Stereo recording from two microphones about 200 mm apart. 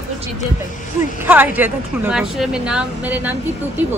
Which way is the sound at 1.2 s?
10° right (ahead or behind).